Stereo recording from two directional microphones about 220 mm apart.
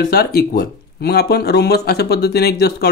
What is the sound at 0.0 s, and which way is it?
Speech, 45° left (ahead or behind).